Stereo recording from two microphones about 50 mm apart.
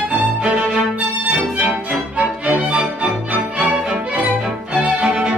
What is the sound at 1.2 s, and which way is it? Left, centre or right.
Music, right.